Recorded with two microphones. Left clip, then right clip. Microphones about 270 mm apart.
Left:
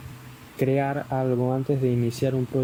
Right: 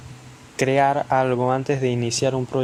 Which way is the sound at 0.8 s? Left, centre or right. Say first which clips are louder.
Right 7 dB; right.